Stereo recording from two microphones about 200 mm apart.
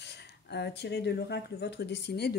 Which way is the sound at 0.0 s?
60° left (ahead or behind).